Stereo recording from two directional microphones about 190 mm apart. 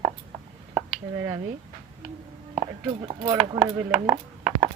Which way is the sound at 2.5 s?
25° right (ahead or behind).